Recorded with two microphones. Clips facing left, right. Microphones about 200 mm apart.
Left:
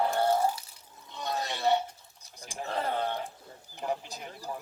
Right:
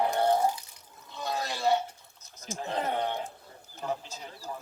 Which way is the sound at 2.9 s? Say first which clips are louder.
Right 1 dB; 15° right (ahead or behind).